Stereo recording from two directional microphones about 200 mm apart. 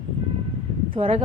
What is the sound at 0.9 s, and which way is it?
Speech, 30° right (ahead or behind).